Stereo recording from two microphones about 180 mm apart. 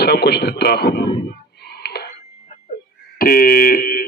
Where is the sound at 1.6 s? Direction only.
65° left (ahead or behind).